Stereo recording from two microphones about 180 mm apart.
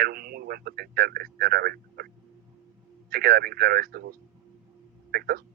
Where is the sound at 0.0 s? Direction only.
55° right (ahead or behind).